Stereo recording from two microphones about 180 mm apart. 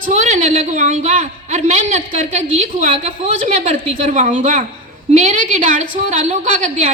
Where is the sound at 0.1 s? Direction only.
40° right (ahead or behind).